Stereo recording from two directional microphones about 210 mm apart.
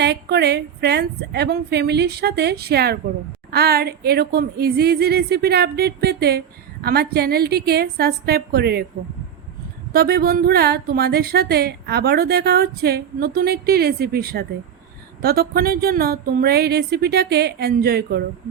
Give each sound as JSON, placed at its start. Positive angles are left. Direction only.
{"t": 0.0, "sound": "speech", "side_deg": -50}
{"t": 9.9, "sound": "speech", "side_deg": -50}